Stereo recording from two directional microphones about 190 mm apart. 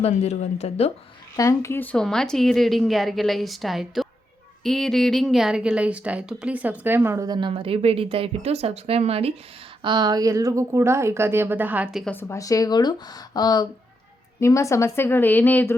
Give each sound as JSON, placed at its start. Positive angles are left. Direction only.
{"t": 0.0, "sound": "speech", "side_deg": 35}
{"t": 1.4, "sound": "a woman's voice", "side_deg": 15}
{"t": 12.1, "sound": "a woman's voice", "side_deg": 15}